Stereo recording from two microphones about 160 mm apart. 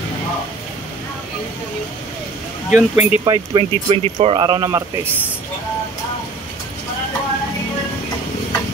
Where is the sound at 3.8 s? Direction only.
40° right (ahead or behind).